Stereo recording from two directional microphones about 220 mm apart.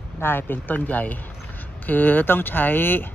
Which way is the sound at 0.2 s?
10° left (ahead or behind).